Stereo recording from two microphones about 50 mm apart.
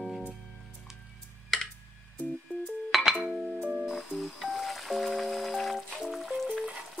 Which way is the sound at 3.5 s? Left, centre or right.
Right.